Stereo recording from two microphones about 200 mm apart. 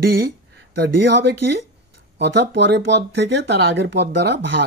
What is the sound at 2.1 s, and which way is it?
Speech, 60° right (ahead or behind).